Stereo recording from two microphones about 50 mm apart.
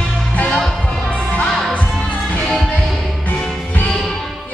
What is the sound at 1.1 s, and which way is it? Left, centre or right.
Music, left.